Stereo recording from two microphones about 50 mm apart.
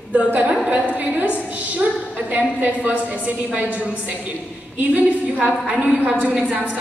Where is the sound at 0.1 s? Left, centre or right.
Right.